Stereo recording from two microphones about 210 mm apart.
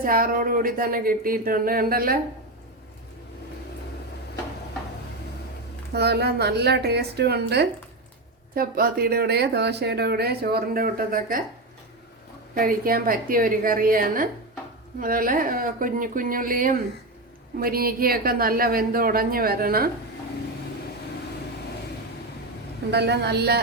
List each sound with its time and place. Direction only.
0.0 s speech: 45° right (ahead or behind)
5.9 s speech: 50° right (ahead or behind)
12.5 s speech: 45° right (ahead or behind)
22.9 s speech: 50° right (ahead or behind)